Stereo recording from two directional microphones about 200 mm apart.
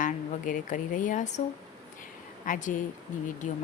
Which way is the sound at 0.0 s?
40° left (ahead or behind).